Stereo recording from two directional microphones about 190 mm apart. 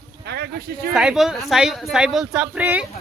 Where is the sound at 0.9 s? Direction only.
Centre (ahead or behind).